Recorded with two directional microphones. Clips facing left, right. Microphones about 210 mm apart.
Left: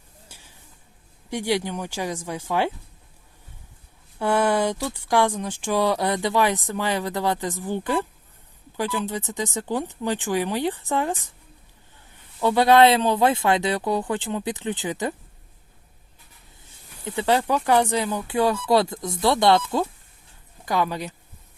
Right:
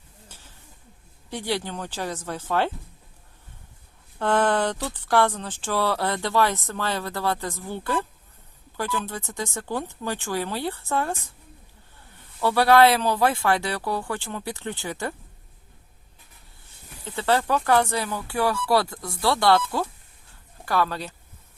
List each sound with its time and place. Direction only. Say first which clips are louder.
0.3 s a sound: right 1 dB; 10° left (ahead or behind)
1.3 s speech: left 4 dB; 15° left (ahead or behind)
4.2 s speech: left 1 dB; 10° left (ahead or behind)
12.4 s speech: left 1 dB; 20° left (ahead or behind)
17.0 s speech: left 2 dB; 15° left (ahead or behind)